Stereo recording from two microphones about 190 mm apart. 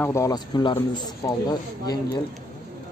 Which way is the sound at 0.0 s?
15° left (ahead or behind).